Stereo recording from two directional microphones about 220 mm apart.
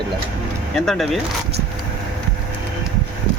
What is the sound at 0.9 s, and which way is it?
Speech, centre (ahead or behind).